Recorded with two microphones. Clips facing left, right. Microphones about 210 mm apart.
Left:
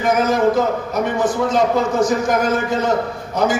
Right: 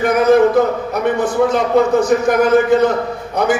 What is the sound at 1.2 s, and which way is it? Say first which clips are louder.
A man's voice: right 1 dB; 60° right (ahead or behind).